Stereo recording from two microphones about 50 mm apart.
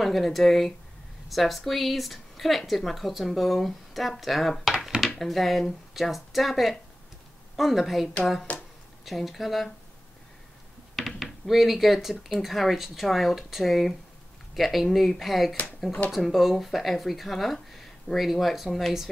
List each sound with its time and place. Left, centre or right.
0.0 s speech: centre
8.5 s a sound: left
9.0 s speech: centre
11.0 s speech: centre